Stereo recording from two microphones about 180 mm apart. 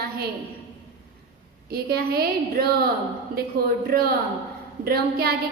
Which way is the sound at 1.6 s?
60° right (ahead or behind).